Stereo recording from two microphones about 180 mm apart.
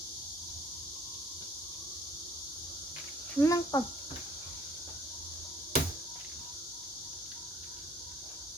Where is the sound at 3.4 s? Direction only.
20° left (ahead or behind).